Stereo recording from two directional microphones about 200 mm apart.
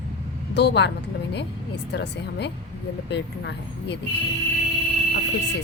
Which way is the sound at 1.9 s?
60° left (ahead or behind).